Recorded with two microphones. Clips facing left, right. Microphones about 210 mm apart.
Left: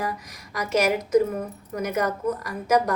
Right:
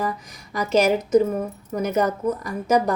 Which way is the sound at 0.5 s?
30° right (ahead or behind).